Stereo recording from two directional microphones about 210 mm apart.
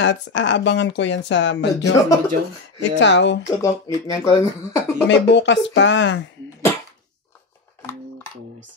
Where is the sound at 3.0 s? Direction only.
60° left (ahead or behind).